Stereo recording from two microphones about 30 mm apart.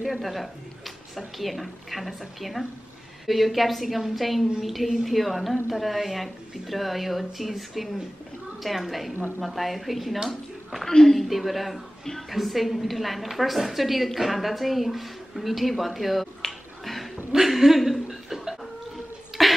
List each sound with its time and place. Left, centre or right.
0.0 s a woman's voice: centre
10.9 s speech: centre
11.1 s a woman's voice: centre
12.0 s a woman's voice: centre
12.3 s a woman's voice: centre
17.5 s speech: centre
19.3 s cough: centre